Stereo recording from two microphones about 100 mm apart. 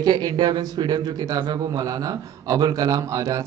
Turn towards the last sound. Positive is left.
turn(degrees=-35)  # may be behind; listen again after turning